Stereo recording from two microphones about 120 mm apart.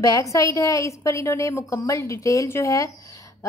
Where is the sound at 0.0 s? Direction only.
25° left (ahead or behind).